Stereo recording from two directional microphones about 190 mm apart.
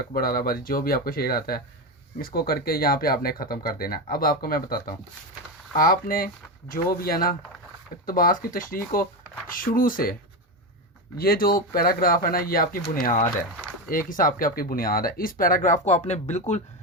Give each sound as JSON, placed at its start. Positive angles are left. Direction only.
{"t": 0.1, "sound": "speech", "side_deg": 50}
{"t": 11.2, "sound": "speech", "side_deg": 50}